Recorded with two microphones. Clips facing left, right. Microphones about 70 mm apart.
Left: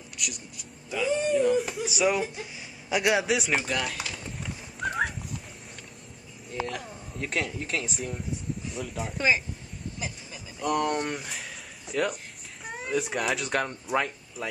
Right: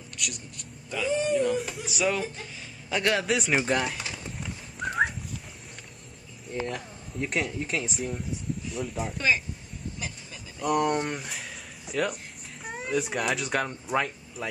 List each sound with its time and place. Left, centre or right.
0.2 s a man's voice: centre
2.0 s speech: centre
3.3 s a man's voice: centre
3.6 s speech: right
4.4 s a sound: centre
6.7 s a man's voice: centre
9.9 s vehicle: centre
10.7 s a man's voice: centre